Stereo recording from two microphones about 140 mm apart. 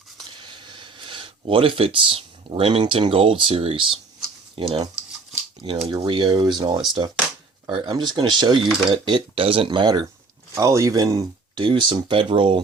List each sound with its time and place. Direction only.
0.4 s speech: 35° right (ahead or behind)